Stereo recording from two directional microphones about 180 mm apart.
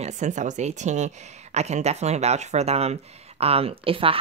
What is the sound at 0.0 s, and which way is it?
Speech, 40° right (ahead or behind).